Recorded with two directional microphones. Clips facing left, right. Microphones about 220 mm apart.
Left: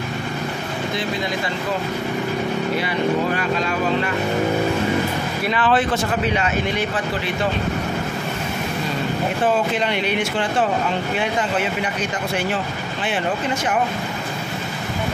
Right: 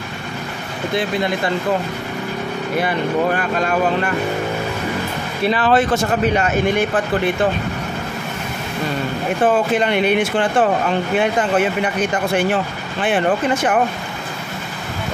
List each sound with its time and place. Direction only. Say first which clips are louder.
3.3 s speech: right 3 dB; 50° right (ahead or behind)
5.5 s speech: right 3 dB; 40° right (ahead or behind)
9.8 s speech: right 5 dB; 55° right (ahead or behind)